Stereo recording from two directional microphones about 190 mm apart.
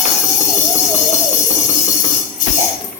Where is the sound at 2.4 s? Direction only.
45° left (ahead or behind).